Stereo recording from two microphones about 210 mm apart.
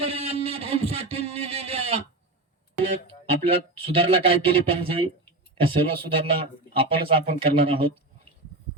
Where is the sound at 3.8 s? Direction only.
25° right (ahead or behind).